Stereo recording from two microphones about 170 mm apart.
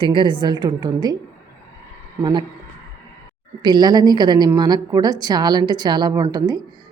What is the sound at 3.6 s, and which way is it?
A woman's voice, 25° right (ahead or behind).